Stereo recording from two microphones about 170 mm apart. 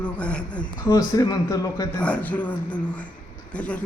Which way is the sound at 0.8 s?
20° left (ahead or behind).